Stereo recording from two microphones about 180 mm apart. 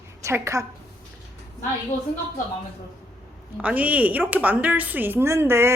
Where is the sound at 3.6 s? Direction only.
10° right (ahead or behind).